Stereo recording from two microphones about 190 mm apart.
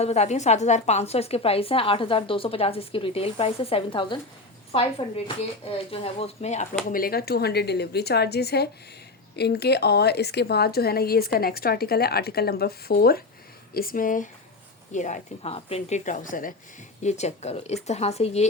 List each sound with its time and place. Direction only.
0.0 s speech: 35° left (ahead or behind)
6.9 s a woman's voice: 50° left (ahead or behind); by 18.4 s 35° left (ahead or behind)